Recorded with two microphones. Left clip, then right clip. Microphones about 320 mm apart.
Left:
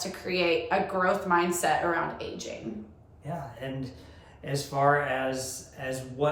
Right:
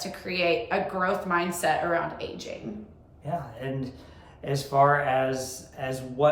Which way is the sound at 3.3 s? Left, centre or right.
Centre.